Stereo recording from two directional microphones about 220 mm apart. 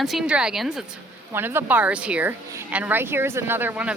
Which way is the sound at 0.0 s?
Centre (ahead or behind).